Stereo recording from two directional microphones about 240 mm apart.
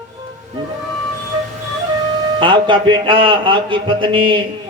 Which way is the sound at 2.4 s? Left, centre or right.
Centre.